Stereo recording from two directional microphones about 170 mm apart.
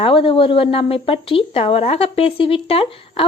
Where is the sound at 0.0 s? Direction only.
30° left (ahead or behind).